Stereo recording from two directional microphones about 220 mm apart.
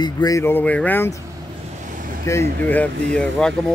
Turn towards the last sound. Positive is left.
turn(degrees=5)  # may be behind; listen again after turning